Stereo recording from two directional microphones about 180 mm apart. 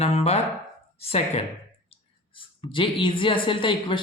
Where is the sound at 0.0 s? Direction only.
35° left (ahead or behind).